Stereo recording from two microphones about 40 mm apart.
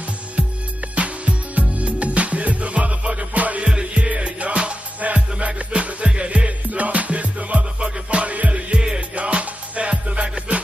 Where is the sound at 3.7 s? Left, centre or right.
Right.